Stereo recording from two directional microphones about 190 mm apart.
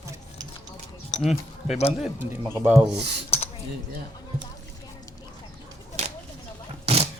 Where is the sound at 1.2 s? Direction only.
Centre (ahead or behind).